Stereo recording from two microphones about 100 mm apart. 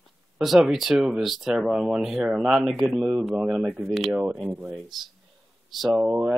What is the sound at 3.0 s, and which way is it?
Speech, 10° right (ahead or behind).